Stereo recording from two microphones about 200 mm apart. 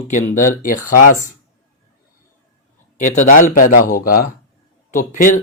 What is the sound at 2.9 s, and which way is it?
Speech, 35° left (ahead or behind).